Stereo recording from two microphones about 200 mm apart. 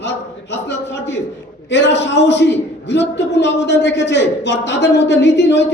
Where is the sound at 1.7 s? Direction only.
60° left (ahead or behind).